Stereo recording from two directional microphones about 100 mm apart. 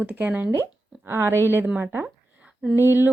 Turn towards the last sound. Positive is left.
turn(degrees=-20)  # may be behind; listen again after turning